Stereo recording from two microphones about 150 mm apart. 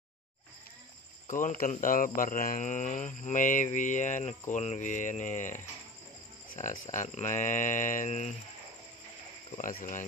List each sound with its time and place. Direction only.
1.2 s speech: 60° left (ahead or behind)
9.6 s speech: 65° left (ahead or behind)